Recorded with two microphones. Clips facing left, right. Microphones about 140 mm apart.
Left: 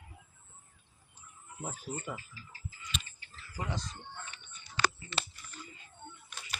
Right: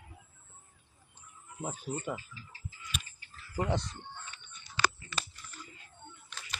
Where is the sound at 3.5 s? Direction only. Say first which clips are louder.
Right 6 dB; 65° right (ahead or behind).